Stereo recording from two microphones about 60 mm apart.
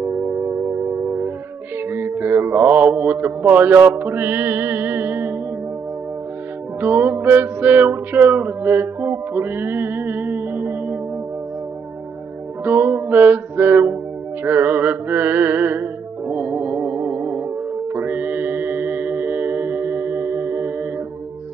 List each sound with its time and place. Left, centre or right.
0.0 s music: right
1.9 s mantra: right
6.8 s music: right
12.6 s music: right